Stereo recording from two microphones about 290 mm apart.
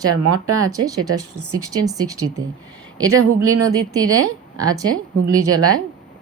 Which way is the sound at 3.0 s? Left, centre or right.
Right.